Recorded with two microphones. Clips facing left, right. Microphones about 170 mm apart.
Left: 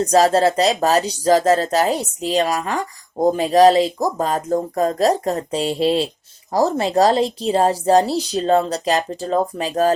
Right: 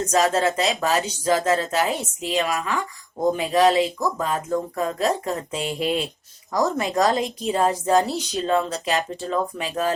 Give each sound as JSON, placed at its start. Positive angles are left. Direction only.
{"t": 0.0, "sound": "speech", "side_deg": 35}